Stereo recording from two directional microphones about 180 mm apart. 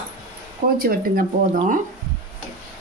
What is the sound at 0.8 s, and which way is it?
Speech, 55° right (ahead or behind).